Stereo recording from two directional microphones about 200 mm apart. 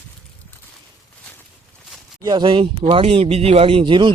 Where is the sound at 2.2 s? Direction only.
25° right (ahead or behind).